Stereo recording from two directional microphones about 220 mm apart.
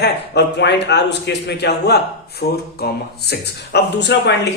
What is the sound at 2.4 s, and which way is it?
Mantra, 40° left (ahead or behind).